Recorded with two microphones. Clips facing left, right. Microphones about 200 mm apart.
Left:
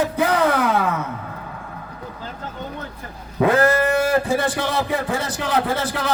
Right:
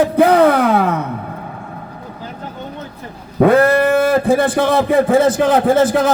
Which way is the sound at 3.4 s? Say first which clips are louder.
Right 6 dB; 60° right (ahead or behind).